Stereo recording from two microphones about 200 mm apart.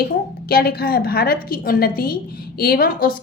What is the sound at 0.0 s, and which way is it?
A woman's voice, 50° left (ahead or behind).